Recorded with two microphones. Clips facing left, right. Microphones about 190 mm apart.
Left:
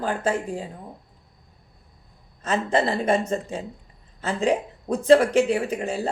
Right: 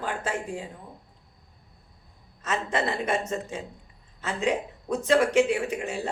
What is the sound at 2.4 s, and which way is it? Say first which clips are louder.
Speech: left 5 dB; 30° left (ahead or behind).